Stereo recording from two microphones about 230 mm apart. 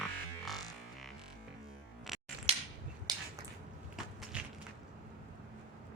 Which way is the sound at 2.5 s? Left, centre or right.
Right.